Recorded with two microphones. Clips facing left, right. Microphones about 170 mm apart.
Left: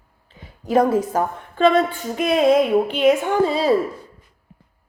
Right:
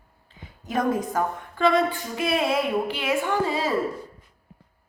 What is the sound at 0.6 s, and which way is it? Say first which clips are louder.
A woman's voice: left 7 dB; 30° left (ahead or behind).